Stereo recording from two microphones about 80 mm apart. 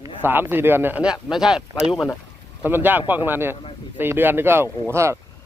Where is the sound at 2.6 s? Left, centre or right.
Right.